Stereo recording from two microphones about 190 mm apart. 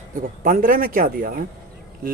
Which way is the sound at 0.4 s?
45° right (ahead or behind).